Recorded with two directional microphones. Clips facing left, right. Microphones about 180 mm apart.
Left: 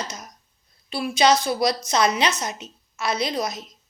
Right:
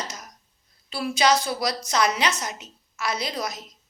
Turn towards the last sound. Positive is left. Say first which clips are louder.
# left 4 dB
turn(degrees=20)  # may be behind; listen again after turning